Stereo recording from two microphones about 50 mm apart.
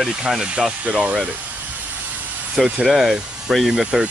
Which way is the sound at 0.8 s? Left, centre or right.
Right.